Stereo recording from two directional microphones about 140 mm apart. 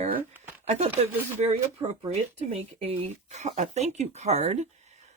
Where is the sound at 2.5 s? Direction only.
50° right (ahead or behind).